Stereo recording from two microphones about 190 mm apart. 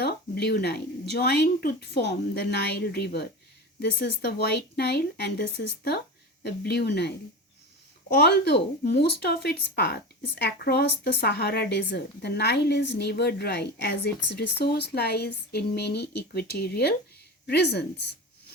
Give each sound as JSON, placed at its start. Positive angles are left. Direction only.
{"t": 0.0, "sound": "speech", "side_deg": 60}
{"t": 8.1, "sound": "speech", "side_deg": 65}